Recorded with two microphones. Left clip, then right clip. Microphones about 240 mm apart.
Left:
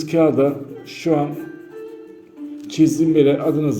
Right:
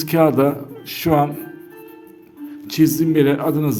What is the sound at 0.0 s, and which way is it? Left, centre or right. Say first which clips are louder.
Speech: right 1 dB; right.